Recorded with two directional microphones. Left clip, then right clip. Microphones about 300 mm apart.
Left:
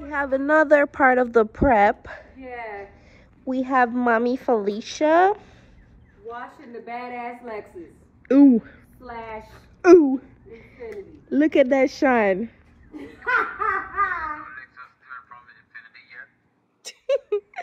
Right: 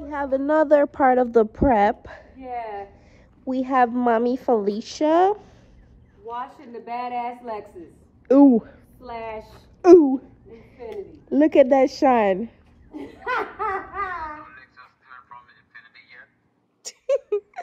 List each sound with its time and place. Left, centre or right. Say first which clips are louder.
0.0 s a woman's voice: left 1 dB; centre
2.6 s a sound: right 2 dB; centre
3.4 s a woman's voice: right 1 dB; centre
6.5 s a woman's voice: even; centre
7.2 s a woman's voice: right 4 dB; centre
8.3 s a woman's voice: right 1 dB; centre
9.5 s a sound: right 1 dB; centre
11.3 s a woman's voice: right 2 dB; centre
12.9 s laughter: left 4 dB; right
17.0 s a sound: even; centre